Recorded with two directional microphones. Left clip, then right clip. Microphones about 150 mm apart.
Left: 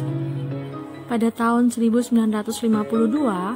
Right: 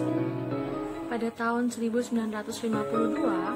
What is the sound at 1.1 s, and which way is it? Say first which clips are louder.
Speech: left 9 dB; 45° left (ahead or behind).